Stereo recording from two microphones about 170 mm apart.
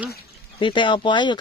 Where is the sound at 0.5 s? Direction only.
30° left (ahead or behind).